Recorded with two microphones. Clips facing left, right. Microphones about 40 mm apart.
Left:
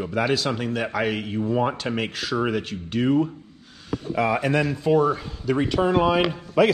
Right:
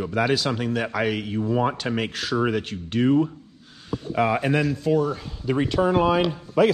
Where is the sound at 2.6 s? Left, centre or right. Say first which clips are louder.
Right 1 dB; centre.